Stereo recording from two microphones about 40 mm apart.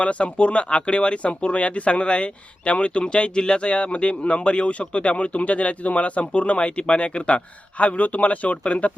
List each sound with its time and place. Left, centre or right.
0.0 s speech: left